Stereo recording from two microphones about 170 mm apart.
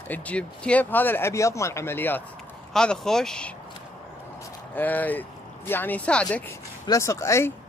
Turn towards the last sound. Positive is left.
turn(degrees=15)  # may be behind; listen again after turning